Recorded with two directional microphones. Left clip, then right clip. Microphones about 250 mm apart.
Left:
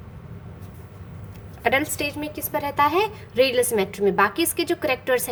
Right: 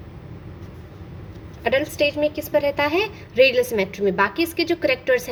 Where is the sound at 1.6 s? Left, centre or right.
Centre.